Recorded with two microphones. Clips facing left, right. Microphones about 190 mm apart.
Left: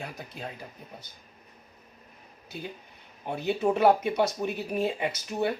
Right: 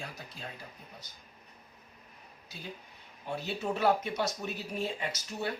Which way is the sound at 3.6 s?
55° left (ahead or behind).